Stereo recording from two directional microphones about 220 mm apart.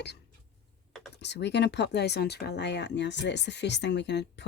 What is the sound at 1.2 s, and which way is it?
Speech, 50° left (ahead or behind).